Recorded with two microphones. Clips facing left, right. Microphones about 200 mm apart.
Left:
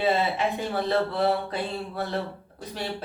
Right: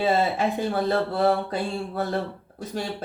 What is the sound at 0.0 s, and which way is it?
Speech, 45° right (ahead or behind).